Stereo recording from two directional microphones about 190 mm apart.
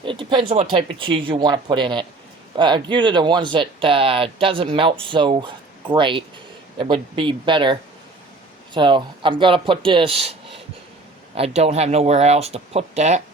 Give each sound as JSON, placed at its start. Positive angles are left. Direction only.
{"t": 0.0, "sound": "speech", "side_deg": -25}